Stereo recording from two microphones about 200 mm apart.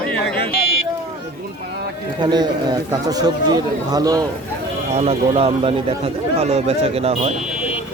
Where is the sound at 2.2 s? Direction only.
20° right (ahead or behind).